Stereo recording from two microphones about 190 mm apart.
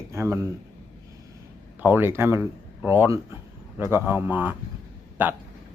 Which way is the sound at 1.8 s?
10° right (ahead or behind).